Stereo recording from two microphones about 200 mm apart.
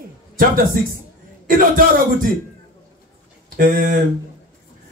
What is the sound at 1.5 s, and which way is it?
Speech, 45° right (ahead or behind).